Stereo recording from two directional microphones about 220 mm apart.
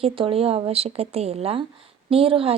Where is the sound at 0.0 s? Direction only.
25° right (ahead or behind).